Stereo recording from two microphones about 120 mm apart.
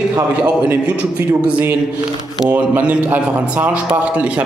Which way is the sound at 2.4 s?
10° right (ahead or behind).